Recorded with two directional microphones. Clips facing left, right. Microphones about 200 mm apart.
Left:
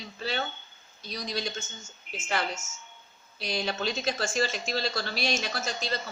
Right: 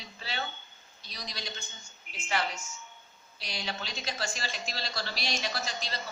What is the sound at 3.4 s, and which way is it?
Speech, 55° left (ahead or behind).